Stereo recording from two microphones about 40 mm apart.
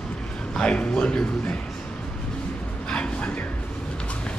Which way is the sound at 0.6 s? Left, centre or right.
Left.